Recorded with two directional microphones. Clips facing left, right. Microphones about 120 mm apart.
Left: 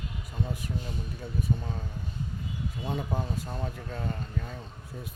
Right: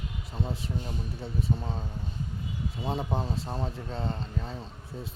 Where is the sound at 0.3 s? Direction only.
30° right (ahead or behind).